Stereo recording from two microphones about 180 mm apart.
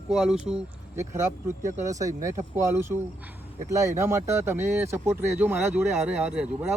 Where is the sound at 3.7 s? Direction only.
15° right (ahead or behind).